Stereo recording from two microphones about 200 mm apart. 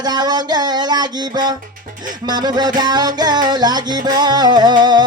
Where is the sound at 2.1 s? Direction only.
20° right (ahead or behind).